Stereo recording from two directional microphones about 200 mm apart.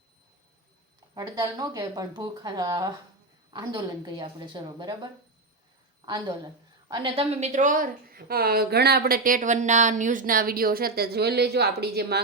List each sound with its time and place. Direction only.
1.1 s speech: 20° right (ahead or behind)
6.1 s a woman's voice: 20° right (ahead or behind); by 12.2 s 55° right (ahead or behind)